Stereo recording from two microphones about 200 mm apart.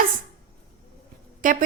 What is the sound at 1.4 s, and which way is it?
Speech, 40° right (ahead or behind).